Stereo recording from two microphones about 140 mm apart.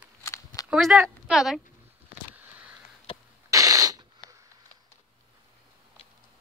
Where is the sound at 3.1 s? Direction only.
40° left (ahead or behind).